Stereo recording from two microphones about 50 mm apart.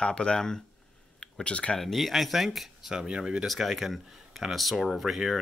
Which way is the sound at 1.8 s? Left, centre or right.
Centre.